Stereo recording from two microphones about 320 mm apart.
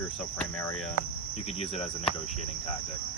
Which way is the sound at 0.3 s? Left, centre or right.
Centre.